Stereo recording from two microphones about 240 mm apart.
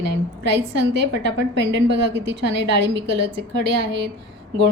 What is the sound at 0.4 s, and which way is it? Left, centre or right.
A woman's voice, right.